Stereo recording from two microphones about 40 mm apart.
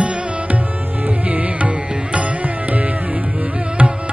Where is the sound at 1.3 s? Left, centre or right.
Right.